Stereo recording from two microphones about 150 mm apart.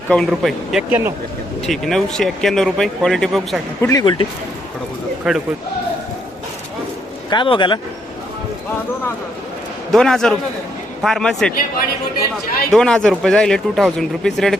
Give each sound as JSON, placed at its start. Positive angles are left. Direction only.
{"t": 0.1, "sound": "speech", "side_deg": 0}
{"t": 0.9, "sound": "speech", "side_deg": -15}
{"t": 1.6, "sound": "speech", "side_deg": 0}
{"t": 3.8, "sound": "speech", "side_deg": 20}
{"t": 5.2, "sound": "speech", "side_deg": 0}
{"t": 7.3, "sound": "speech", "side_deg": 35}
{"t": 9.9, "sound": "speech", "side_deg": 5}
{"t": 12.7, "sound": "speech", "side_deg": 5}